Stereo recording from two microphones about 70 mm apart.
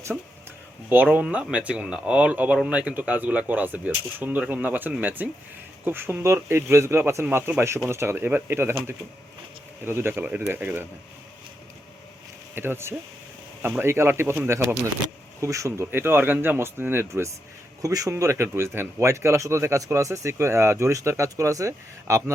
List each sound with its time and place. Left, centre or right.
0.9 s speech: right
9.8 s speech: right
12.5 s speech: right
15.9 s speech: right
17.8 s speech: right
18.1 s speech: right